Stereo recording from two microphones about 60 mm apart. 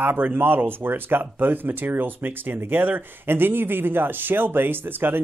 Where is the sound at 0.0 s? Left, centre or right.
Right.